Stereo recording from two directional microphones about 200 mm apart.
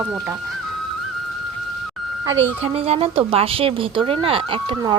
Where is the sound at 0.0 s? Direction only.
5° right (ahead or behind).